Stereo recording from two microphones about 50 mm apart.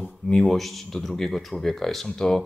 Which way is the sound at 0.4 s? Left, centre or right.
Centre.